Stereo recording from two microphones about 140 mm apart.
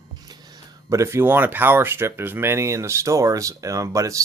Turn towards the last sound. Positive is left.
turn(degrees=-25)  # may be behind; listen again after turning